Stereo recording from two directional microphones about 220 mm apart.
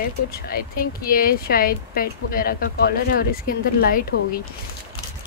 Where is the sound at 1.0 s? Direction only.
40° left (ahead or behind).